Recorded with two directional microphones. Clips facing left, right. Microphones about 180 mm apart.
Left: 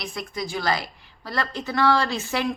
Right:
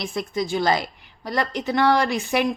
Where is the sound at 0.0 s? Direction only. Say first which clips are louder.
Right 5 dB; 25° right (ahead or behind).